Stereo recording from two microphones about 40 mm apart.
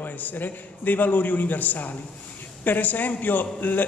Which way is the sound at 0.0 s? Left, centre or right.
Left.